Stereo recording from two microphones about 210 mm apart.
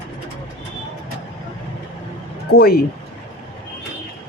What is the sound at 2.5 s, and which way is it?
Speech, 45° left (ahead or behind).